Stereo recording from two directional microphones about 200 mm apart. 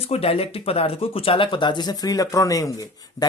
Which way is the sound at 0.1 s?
30° left (ahead or behind).